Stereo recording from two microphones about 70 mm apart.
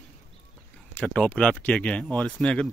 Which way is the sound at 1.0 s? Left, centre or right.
Centre.